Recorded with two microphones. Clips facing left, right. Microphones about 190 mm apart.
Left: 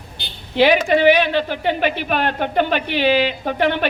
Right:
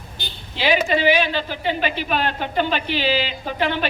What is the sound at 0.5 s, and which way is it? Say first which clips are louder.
Speech: left 5 dB; 60° left (ahead or behind).